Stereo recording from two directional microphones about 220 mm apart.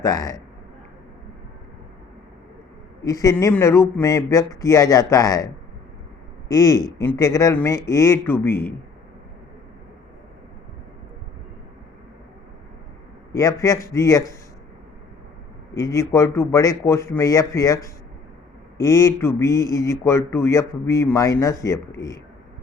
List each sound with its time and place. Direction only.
0.0 s speech: 15° left (ahead or behind)
3.0 s speech: 15° left (ahead or behind)
6.5 s speech: 15° left (ahead or behind)
13.3 s speech: 15° left (ahead or behind)
15.7 s speech: 15° left (ahead or behind)